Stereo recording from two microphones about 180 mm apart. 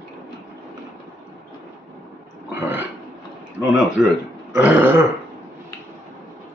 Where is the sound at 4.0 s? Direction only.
Centre (ahead or behind).